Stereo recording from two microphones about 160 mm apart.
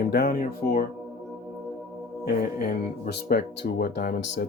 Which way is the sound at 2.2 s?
75° left (ahead or behind).